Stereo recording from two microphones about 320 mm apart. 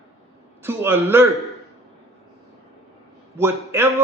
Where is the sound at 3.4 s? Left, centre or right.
Centre.